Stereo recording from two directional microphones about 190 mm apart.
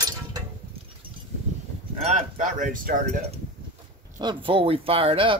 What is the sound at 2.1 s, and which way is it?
Speech, 40° right (ahead or behind).